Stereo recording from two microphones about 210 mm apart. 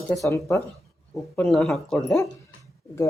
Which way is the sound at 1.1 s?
Centre (ahead or behind).